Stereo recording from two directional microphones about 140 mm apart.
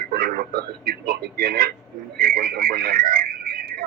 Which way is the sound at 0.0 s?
90° right.